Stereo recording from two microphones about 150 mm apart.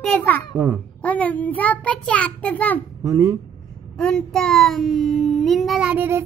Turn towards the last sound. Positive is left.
turn(degrees=-15)  # may be behind; listen again after turning